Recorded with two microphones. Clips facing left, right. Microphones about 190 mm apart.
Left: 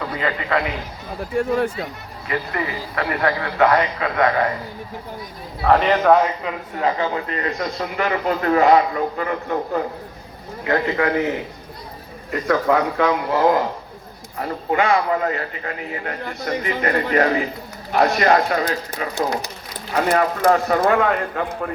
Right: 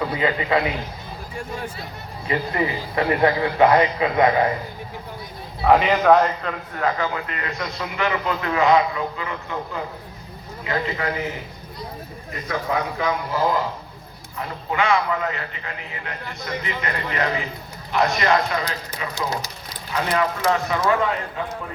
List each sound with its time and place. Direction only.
0.2 s a man's voice: 15° right (ahead or behind)
1.4 s speech: 55° left (ahead or behind)
2.2 s a man's voice: 25° right (ahead or behind)
5.6 s a man's voice: 5° right (ahead or behind)
6.7 s a man's voice: 25° left (ahead or behind); by 11.1 s 55° left (ahead or behind)
12.5 s speech: 70° left (ahead or behind)
14.3 s a man's voice: 45° left (ahead or behind)